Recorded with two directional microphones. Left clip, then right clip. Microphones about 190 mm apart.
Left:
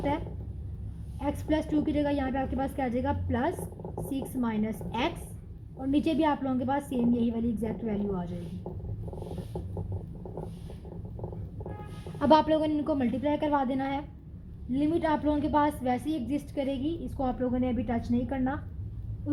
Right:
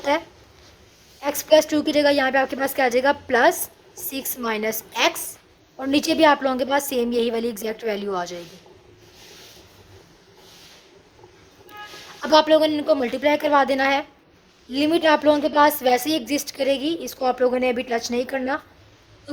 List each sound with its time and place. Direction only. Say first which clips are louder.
0.1 s a woman's voice: right 10 dB; 45° right (ahead or behind)
12.3 s a woman's voice: right 8 dB; 30° right (ahead or behind); by 18.6 s 55° right (ahead or behind)